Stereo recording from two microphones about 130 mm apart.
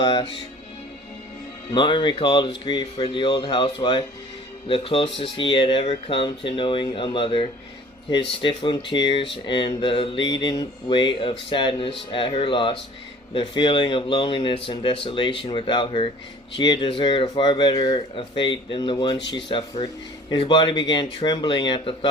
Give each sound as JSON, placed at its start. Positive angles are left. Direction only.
{"t": 0.0, "sound": "speech", "side_deg": 40}
{"t": 1.7, "sound": "speech", "side_deg": 40}